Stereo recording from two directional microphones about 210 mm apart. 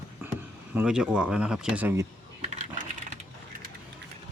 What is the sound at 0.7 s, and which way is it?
Speech, 5° right (ahead or behind).